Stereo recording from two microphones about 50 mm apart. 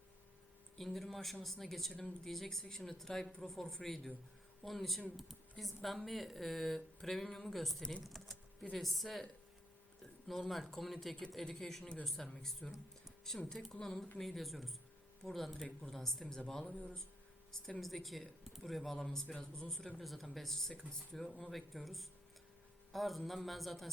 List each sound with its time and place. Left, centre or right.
0.8 s speech: centre
10.0 s a sound: centre
10.5 s speech: centre
11.8 s speech: left
12.0 s speech: centre
14.2 s speech: centre
17.7 s speech: centre
21.5 s speech: centre